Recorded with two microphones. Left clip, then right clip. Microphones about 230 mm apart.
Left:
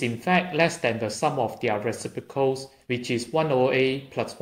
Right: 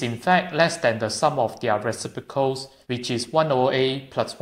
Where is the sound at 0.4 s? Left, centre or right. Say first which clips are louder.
Right 2 dB; centre.